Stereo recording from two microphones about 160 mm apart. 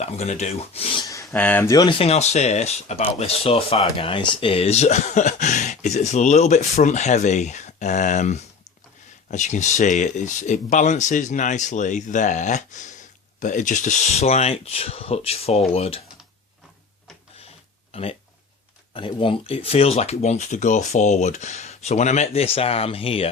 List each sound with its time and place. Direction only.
0.0 s speech: 45° left (ahead or behind)
1.0 s a sound: 20° left (ahead or behind)
1.3 s speech: 10° left (ahead or behind)
1.7 s speech: 30° left (ahead or behind)
17.9 s speech: 40° left (ahead or behind)